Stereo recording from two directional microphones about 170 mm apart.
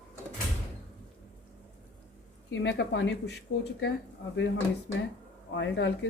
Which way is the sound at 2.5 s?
90° left.